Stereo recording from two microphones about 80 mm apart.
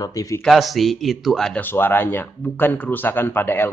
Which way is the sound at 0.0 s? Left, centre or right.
Left.